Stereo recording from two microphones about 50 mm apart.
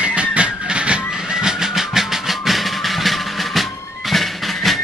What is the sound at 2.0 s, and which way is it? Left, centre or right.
Music, centre.